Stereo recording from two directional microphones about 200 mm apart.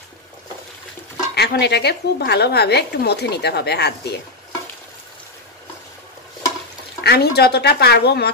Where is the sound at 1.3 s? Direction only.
55° left (ahead or behind).